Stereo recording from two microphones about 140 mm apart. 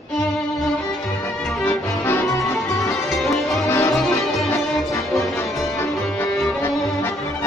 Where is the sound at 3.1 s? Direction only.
Centre (ahead or behind).